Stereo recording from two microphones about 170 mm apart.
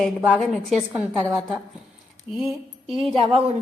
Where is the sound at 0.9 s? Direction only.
15° right (ahead or behind).